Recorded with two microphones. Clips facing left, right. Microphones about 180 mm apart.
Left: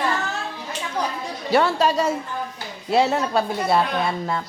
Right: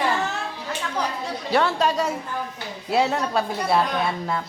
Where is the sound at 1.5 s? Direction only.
Centre (ahead or behind).